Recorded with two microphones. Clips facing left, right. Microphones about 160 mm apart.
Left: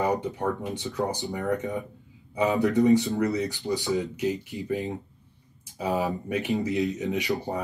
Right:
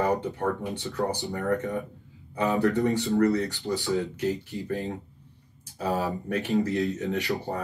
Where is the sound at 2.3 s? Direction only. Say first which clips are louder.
Left 1 dB; 20° left (ahead or behind).